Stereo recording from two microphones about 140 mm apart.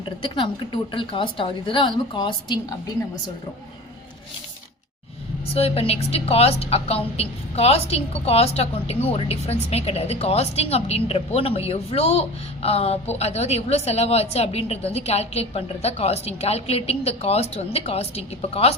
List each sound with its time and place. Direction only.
0.0 s a woman's voice: 35° left (ahead or behind)
5.5 s a woman's voice: 45° left (ahead or behind)